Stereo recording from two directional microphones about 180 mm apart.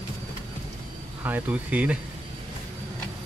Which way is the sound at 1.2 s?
10° right (ahead or behind).